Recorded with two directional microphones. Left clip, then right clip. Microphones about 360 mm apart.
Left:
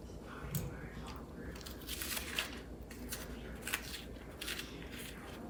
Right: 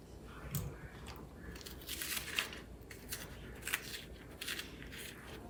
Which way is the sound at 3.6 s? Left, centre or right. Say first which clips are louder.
Right 1 dB; centre.